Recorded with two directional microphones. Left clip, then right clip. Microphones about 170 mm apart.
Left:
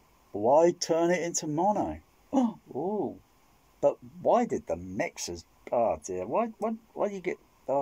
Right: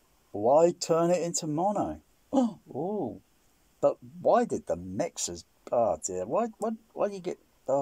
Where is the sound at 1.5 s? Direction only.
10° right (ahead or behind).